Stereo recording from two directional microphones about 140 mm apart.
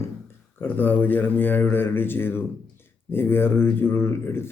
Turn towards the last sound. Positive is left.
turn(degrees=15)  # may be behind; listen again after turning